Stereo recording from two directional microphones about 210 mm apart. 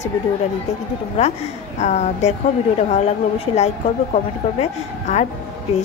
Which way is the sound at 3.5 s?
30° left (ahead or behind).